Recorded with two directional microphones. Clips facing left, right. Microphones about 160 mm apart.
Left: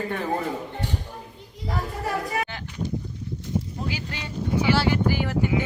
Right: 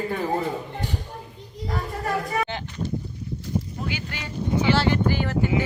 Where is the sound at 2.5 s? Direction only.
25° right (ahead or behind).